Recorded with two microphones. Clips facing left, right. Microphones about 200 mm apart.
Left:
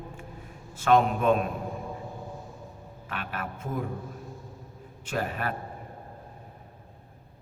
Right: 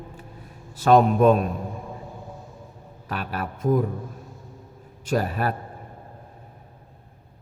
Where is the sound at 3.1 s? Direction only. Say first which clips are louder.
Right 5 dB; 40° right (ahead or behind).